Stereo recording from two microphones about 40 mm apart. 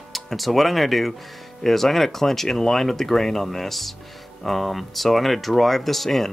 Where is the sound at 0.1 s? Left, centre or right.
Centre.